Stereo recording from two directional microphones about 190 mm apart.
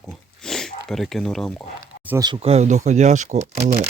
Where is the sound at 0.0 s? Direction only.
Centre (ahead or behind).